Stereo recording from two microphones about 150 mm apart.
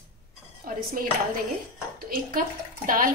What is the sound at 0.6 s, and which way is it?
Speech, 65° right (ahead or behind).